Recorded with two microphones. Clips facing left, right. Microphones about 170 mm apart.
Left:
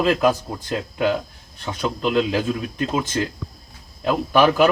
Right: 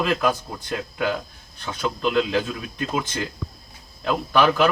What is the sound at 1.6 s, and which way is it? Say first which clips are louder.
Speech: left 1 dB; 15° left (ahead or behind).